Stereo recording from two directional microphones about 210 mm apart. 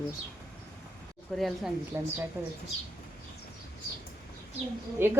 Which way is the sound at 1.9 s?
10° right (ahead or behind).